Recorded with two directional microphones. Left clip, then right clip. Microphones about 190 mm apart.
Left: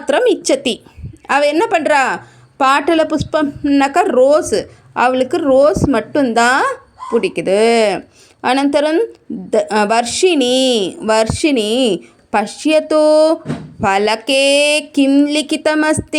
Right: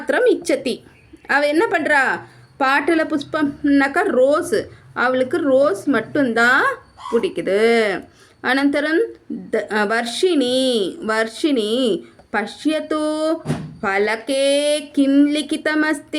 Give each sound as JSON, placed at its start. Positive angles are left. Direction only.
{"t": 0.0, "sound": "a woman's voice", "side_deg": 30}